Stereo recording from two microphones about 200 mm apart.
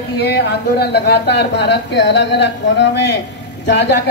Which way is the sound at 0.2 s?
55° left (ahead or behind).